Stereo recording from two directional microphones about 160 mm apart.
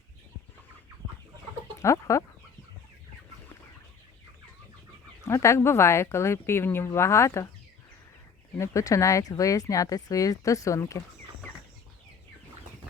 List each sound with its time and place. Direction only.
1.8 s speech: 20° left (ahead or behind)
5.2 s speech: 20° left (ahead or behind)
8.5 s speech: 20° left (ahead or behind)